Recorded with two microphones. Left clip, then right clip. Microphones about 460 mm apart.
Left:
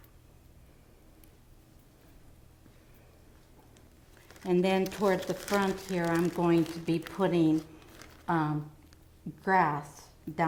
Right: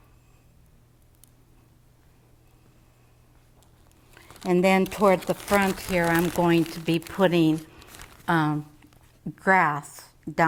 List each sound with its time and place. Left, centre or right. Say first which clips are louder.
4.4 s speech: right 6 dB; right